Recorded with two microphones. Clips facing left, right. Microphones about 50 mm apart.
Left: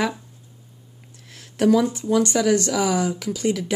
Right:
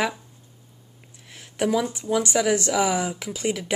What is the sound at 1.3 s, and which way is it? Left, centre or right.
Speech, centre.